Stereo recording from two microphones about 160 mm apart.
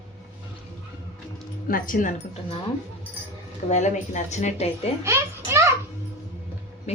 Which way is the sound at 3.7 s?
45° left (ahead or behind).